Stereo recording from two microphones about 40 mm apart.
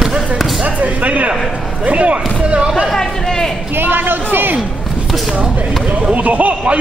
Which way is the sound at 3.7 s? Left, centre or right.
Right.